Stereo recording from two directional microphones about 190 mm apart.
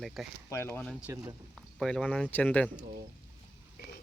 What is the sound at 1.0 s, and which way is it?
Speech, 15° right (ahead or behind).